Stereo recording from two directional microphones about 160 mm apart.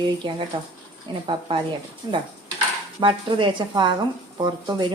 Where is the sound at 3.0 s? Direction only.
30° right (ahead or behind).